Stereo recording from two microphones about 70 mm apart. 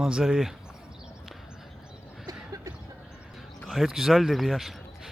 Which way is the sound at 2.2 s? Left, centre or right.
Right.